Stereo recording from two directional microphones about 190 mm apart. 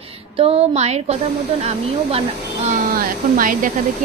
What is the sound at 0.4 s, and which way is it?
Speech, 35° right (ahead or behind).